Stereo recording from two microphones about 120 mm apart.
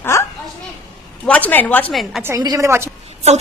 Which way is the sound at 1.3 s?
15° left (ahead or behind).